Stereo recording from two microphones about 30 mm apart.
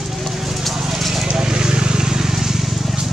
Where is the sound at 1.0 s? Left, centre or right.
Centre.